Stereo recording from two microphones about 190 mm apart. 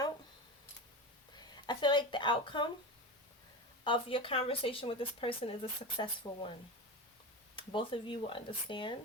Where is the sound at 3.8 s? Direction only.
25° left (ahead or behind).